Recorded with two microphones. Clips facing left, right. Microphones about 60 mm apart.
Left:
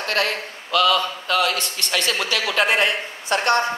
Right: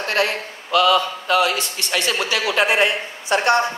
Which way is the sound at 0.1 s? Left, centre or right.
Centre.